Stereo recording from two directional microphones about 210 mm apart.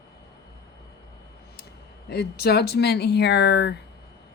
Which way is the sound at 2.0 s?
50° left (ahead or behind).